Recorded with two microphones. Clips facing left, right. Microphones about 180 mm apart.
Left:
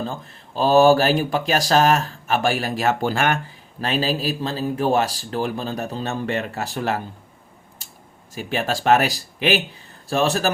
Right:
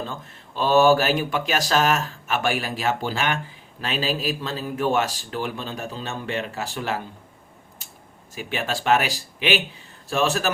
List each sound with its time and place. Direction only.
0.1 s speech: 35° left (ahead or behind)
8.4 s speech: 40° left (ahead or behind)